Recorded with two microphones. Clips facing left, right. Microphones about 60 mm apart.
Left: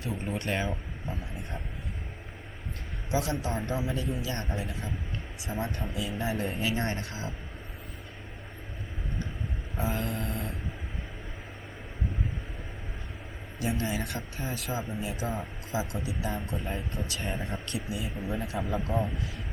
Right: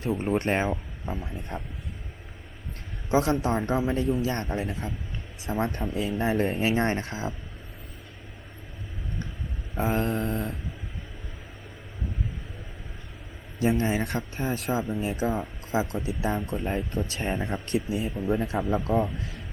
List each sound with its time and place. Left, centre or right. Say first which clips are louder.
0.0 s speech: right 8 dB; right
3.1 s speech: right 7 dB; right
9.7 s speech: right 6 dB; right
13.6 s speech: right 7 dB; right